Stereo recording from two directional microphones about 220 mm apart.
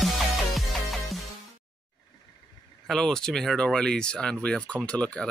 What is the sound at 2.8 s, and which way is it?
Speech, centre (ahead or behind).